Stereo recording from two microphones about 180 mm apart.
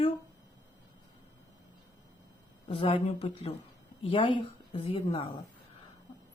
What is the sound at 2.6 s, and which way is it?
Speech, 30° left (ahead or behind).